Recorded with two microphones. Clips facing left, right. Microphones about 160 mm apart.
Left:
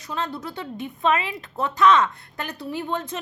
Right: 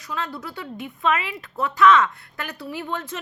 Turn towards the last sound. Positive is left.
turn(degrees=15)  # may be behind; listen again after turning